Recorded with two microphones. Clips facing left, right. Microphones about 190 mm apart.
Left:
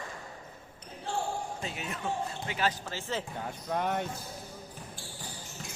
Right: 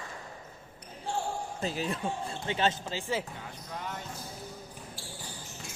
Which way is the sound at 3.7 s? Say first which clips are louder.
Left 9 dB; 60° left (ahead or behind).